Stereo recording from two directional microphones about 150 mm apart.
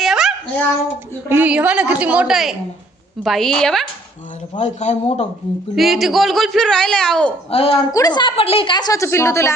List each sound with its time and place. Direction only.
0.0 s a sound: centre (ahead or behind)
1.3 s a woman's voice: 10° right (ahead or behind)
4.5 s speech: 50° left (ahead or behind)
5.7 s speech: centre (ahead or behind)
7.5 s a woman's voice: 40° left (ahead or behind)
7.9 s speech: 25° left (ahead or behind)